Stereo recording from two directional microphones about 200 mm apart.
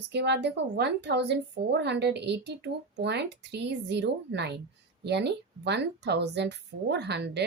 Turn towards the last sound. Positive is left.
turn(degrees=-55)  # may be behind; listen again after turning